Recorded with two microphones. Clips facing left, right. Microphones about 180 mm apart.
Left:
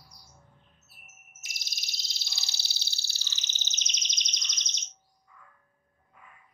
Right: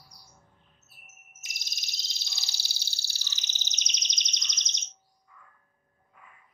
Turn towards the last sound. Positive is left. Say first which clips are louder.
# right 1 dB
turn(degrees=-20)  # may be behind; listen again after turning